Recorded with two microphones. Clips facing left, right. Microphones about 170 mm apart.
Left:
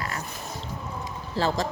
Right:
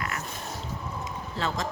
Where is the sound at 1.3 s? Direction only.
35° left (ahead or behind).